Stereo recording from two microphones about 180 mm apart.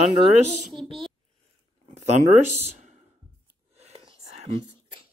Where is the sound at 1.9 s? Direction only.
40° right (ahead or behind).